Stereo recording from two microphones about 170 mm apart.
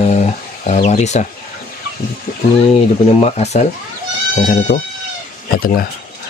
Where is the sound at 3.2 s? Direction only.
40° left (ahead or behind); by 5.9 s 60° left (ahead or behind).